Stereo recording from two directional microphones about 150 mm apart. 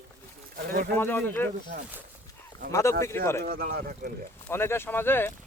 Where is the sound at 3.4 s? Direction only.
80° right.